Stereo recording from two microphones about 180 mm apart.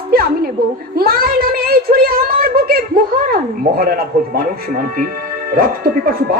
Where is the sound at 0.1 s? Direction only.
55° right (ahead or behind).